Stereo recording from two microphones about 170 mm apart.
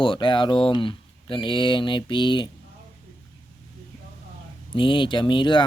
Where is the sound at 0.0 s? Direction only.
30° left (ahead or behind).